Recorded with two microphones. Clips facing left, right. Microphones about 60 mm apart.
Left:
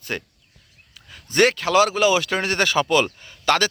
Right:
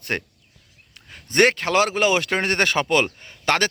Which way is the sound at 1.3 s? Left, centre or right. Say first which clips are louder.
Even; right.